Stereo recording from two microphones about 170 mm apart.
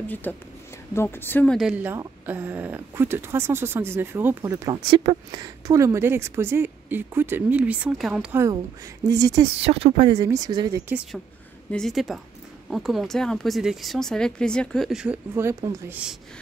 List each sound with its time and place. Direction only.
0.1 s a woman's voice: 10° left (ahead or behind); by 4.7 s 15° right (ahead or behind)
4.9 s a woman's voice: 25° right (ahead or behind)
9.6 s speech: 35° right (ahead or behind)
10.1 s speech: 20° right (ahead or behind)
11.7 s speech: centre (ahead or behind)
15.4 s a woman's voice: 15° right (ahead or behind)